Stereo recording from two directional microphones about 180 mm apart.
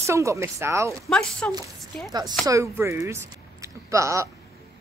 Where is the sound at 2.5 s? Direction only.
15° right (ahead or behind).